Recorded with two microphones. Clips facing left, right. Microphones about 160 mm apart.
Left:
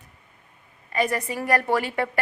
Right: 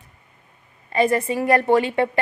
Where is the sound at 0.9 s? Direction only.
25° right (ahead or behind).